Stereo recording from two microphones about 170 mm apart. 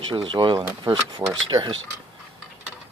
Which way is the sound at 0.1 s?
30° right (ahead or behind).